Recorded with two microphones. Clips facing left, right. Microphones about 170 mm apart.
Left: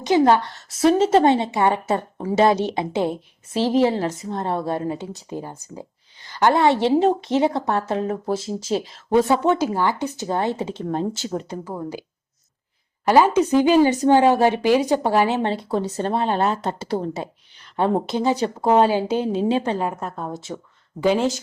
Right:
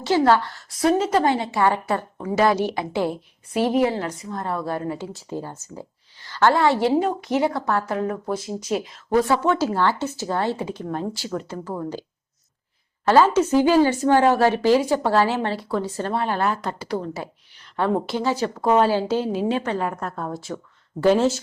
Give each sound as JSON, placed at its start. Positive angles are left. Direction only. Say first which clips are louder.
{"t": 0.0, "sound": "a woman's voice", "louder": "left 2 dB", "side_deg": 20}
{"t": 13.1, "sound": "a woman's voice", "louder": "left 1 dB", "side_deg": 15}